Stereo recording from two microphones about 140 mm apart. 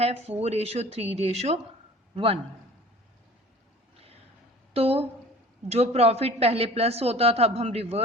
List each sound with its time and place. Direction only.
0.0 s a woman's voice: 45° right (ahead or behind)
4.7 s a woman's voice: 45° right (ahead or behind)